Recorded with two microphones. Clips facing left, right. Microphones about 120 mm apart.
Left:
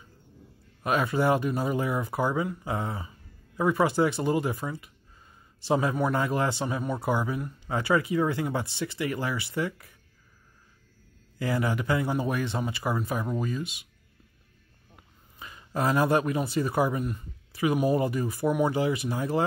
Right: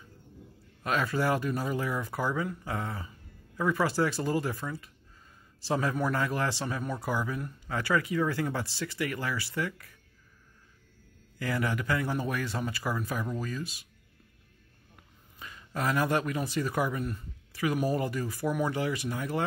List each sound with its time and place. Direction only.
0.8 s speech: 25° left (ahead or behind)
11.3 s speech: 25° left (ahead or behind)
15.3 s speech: 25° left (ahead or behind)